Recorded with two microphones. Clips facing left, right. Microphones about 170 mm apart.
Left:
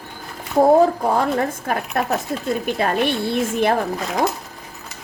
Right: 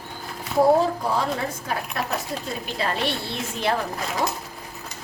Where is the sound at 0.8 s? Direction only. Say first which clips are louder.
Left 6 dB; 50° left (ahead or behind).